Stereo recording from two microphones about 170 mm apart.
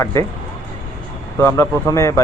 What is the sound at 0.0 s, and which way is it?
Speech, 20° left (ahead or behind).